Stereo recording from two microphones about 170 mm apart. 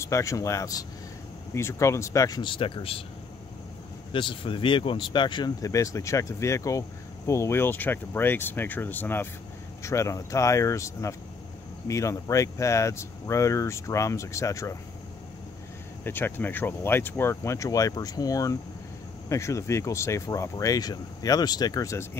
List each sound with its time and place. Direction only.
0.0 s speech: 20° left (ahead or behind)
4.1 s speech: 30° left (ahead or behind)
16.0 s speech: 10° left (ahead or behind)